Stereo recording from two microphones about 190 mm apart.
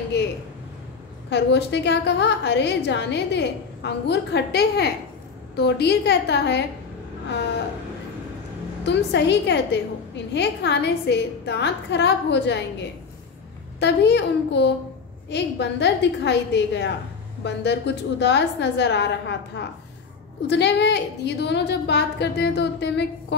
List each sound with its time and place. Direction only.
1.3 s a woman's voice: 65° left (ahead or behind)
8.8 s a woman's voice: 65° left (ahead or behind)
13.7 s a woman's voice: 65° left (ahead or behind)